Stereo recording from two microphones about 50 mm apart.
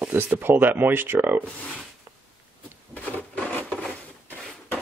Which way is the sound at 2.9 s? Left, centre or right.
Left.